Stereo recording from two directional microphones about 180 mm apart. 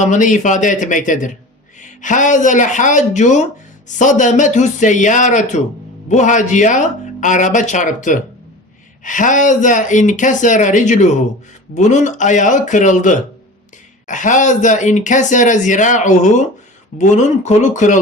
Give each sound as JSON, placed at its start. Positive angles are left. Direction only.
{"t": 0.0, "sound": "speech", "side_deg": 45}